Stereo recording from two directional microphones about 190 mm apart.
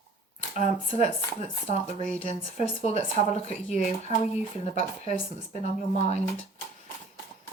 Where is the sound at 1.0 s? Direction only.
35° left (ahead or behind).